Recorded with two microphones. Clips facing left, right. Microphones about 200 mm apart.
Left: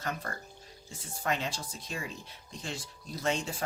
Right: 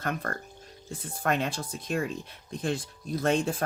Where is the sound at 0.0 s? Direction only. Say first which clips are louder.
Right 5 dB; 55° right (ahead or behind).